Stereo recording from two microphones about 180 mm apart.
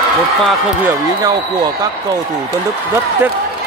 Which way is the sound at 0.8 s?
20° right (ahead or behind).